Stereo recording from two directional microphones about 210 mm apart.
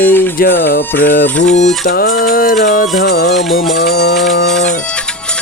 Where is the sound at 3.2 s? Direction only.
Centre (ahead or behind).